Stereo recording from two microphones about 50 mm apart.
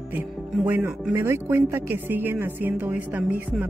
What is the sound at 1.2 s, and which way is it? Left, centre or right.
Speech, right.